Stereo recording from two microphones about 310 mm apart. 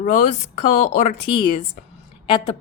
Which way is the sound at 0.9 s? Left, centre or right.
Centre.